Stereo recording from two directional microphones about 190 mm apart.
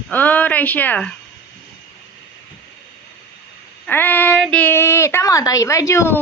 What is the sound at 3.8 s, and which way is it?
Speech, 10° left (ahead or behind).